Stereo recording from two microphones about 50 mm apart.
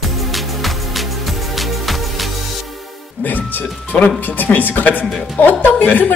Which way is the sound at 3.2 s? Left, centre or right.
Left.